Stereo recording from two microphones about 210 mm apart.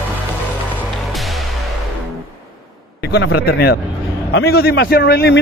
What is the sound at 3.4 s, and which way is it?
A man's voice, 50° left (ahead or behind).